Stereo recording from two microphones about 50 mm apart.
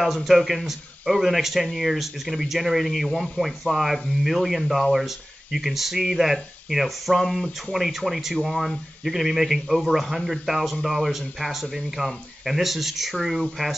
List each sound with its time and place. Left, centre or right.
0.0 s speech: centre
7.2 s speech: centre
7.7 s speech: centre
12.0 s speech: left
12.4 s speech: centre